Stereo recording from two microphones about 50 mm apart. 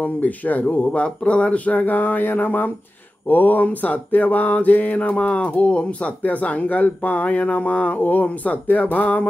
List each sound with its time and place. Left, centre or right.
0.0 s mantra: left
0.8 s mantra: left